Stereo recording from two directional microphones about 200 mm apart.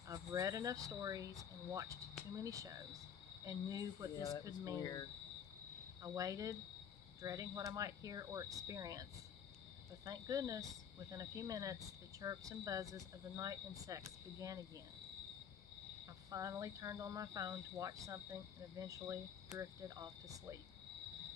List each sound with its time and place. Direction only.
0.1 s speech: 15° right (ahead or behind)
4.7 s speech: 20° left (ahead or behind)
6.0 s speech: 15° right (ahead or behind)
10.0 s speech: 15° right (ahead or behind)
16.3 s speech: 15° right (ahead or behind)